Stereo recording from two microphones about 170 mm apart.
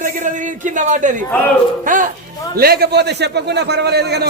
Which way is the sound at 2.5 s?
65° right (ahead or behind).